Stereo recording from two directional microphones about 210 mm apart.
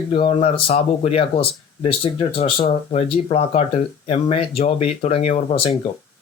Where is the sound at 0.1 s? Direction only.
25° left (ahead or behind).